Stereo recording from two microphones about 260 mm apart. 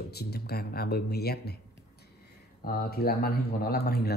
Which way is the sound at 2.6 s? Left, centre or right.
Left.